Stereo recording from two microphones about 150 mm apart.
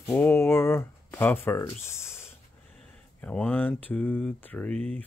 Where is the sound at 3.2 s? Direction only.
10° left (ahead or behind).